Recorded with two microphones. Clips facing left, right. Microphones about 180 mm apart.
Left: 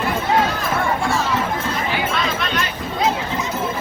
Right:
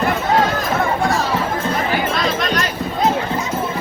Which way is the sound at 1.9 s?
40° right (ahead or behind).